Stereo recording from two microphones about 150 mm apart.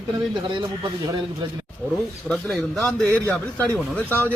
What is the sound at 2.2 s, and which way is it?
A man's voice, 5° left (ahead or behind).